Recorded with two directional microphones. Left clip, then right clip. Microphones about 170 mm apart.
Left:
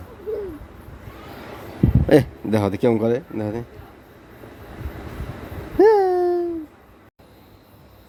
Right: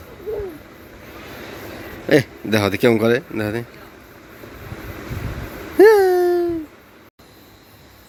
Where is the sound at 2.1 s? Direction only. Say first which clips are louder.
Right 1 dB; 25° left (ahead or behind).